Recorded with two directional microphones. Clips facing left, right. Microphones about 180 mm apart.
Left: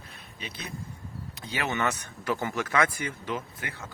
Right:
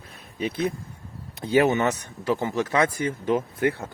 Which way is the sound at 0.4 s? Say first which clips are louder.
Right 15 dB; 55° right (ahead or behind).